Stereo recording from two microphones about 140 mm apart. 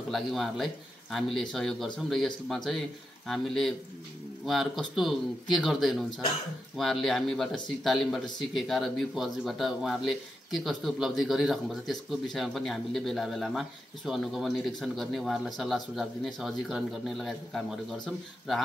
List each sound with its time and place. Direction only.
0.1 s speech: centre (ahead or behind)